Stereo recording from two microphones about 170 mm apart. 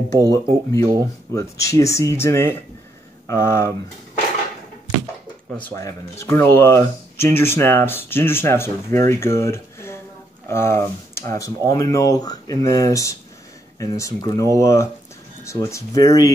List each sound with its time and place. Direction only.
0.3 s speech: 20° left (ahead or behind)
5.6 s speech: 15° left (ahead or behind)